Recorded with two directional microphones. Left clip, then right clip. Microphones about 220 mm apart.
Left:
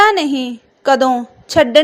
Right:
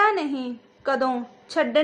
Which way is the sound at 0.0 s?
30° left (ahead or behind).